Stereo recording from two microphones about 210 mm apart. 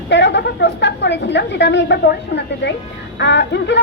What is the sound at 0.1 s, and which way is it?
A woman's voice, 55° left (ahead or behind).